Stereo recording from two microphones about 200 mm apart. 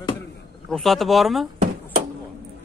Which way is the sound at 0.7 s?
Centre (ahead or behind).